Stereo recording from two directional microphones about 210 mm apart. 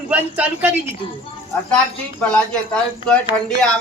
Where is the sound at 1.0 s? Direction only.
25° left (ahead or behind).